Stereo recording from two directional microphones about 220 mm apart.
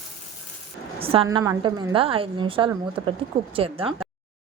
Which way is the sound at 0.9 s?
25° right (ahead or behind).